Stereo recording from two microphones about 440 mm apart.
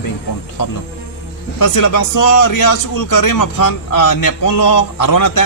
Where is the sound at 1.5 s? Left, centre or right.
Left.